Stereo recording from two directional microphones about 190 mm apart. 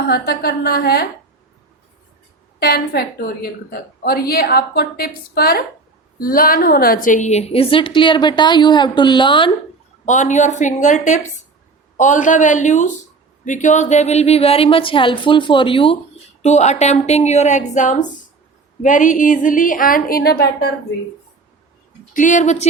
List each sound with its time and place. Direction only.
0.1 s a woman's voice: 55° left (ahead or behind)
2.6 s a woman's voice: 55° left (ahead or behind); by 9.5 s 25° left (ahead or behind)
10.1 s a woman's voice: 40° left (ahead or behind); by 20.7 s 55° left (ahead or behind)
22.1 s a woman's voice: 40° left (ahead or behind)